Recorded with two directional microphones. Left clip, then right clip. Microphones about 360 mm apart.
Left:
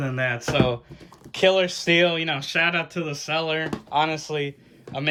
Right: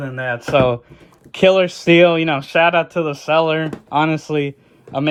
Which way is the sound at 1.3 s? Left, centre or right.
Centre.